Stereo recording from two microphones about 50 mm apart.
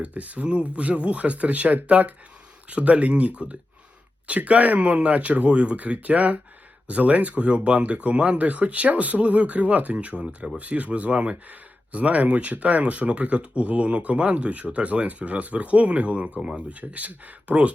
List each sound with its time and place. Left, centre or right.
0.0 s speech: right